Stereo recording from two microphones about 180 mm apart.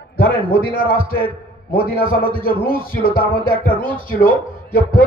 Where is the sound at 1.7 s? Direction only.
55° left (ahead or behind).